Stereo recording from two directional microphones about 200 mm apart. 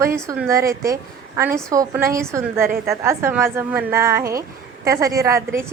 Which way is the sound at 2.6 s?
45° right (ahead or behind).